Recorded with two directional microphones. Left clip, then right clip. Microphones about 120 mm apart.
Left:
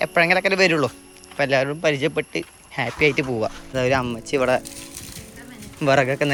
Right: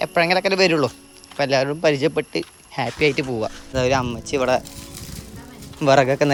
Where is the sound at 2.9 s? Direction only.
25° right (ahead or behind).